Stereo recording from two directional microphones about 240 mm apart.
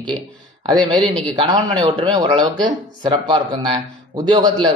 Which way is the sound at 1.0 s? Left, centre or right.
Centre.